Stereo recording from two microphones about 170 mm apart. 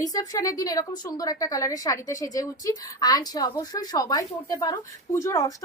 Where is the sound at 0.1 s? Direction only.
20° left (ahead or behind).